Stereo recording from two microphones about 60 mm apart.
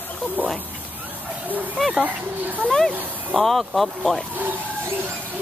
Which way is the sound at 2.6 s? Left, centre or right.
Centre.